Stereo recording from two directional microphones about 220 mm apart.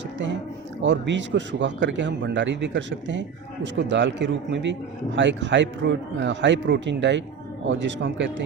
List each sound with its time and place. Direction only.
0.8 s a man's voice: 55° right (ahead or behind)